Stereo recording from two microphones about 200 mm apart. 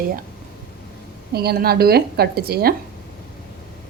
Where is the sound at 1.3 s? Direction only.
50° right (ahead or behind).